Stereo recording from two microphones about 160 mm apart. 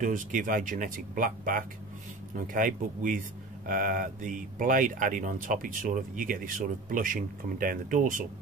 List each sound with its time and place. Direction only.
0.0 s speech: 55° right (ahead or behind)